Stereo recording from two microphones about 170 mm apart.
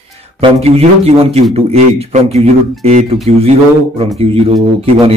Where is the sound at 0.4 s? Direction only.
35° right (ahead or behind).